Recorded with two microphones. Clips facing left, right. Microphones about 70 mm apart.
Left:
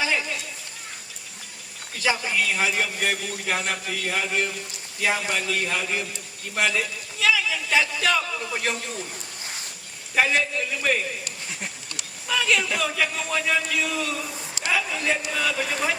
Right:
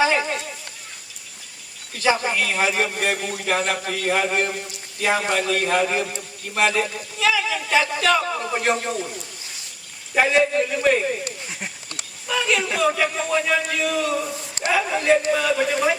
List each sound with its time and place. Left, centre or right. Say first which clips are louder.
0.0 s a sound: right 6 dB; right
2.1 s a man's voice: right 3 dB; right
6.1 s a man's voice: right 4 dB; right
10.2 s a man's voice: right 5 dB; right